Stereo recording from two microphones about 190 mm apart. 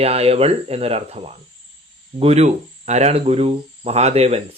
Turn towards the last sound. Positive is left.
turn(degrees=-35)  # may be behind; listen again after turning